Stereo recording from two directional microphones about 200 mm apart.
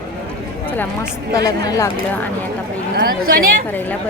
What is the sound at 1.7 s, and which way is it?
Speech, 15° left (ahead or behind).